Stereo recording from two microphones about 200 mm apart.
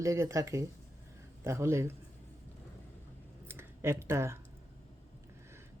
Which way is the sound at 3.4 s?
10° right (ahead or behind).